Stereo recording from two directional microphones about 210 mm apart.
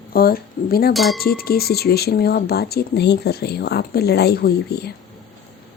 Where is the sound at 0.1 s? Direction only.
45° left (ahead or behind).